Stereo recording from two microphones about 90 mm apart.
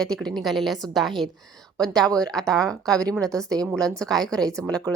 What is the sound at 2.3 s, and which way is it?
Speech, 5° left (ahead or behind).